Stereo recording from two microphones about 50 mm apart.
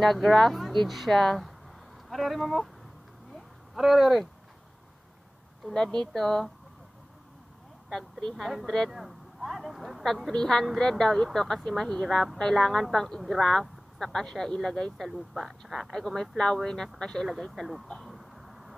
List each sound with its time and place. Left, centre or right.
0.0 s speech: centre
3.7 s speech: centre
5.8 s speech: centre
7.9 s speech: centre
8.5 s speech: centre
10.3 s speech: centre
15.0 s speech: centre
15.9 s speech: centre
17.4 s speech: centre
17.8 s a sound: centre